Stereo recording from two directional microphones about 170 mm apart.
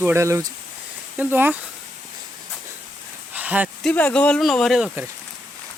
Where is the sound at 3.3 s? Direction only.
10° right (ahead or behind).